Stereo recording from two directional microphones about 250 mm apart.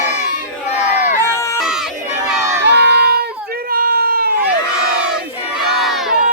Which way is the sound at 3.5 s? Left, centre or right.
Right.